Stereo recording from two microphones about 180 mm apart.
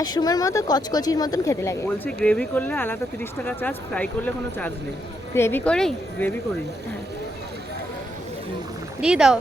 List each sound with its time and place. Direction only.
0.0 s speech: 20° left (ahead or behind); by 6.3 s 5° left (ahead or behind)
9.0 s speech: 5° right (ahead or behind)